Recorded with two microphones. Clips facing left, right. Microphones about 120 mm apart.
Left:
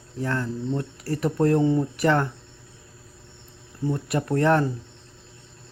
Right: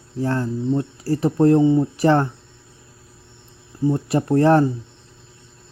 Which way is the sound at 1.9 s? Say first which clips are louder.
Right 5 dB; 30° right (ahead or behind).